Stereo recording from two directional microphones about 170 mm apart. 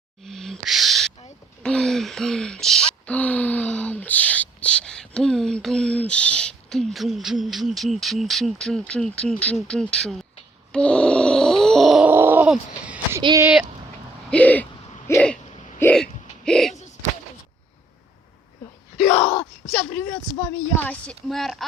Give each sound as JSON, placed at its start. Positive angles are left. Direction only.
{"t": 0.3, "sound": "a sound", "side_deg": 0}
{"t": 3.1, "sound": "gasp", "side_deg": 10}
{"t": 8.9, "sound": "speech", "side_deg": 5}
{"t": 10.7, "sound": "groan", "side_deg": 5}
{"t": 13.2, "sound": "speech", "side_deg": -20}
{"t": 14.3, "sound": "hoot", "side_deg": 10}
{"t": 15.8, "sound": "hiccup", "side_deg": 5}
{"t": 18.9, "sound": "wail", "side_deg": 5}
{"t": 19.4, "sound": "speech", "side_deg": 5}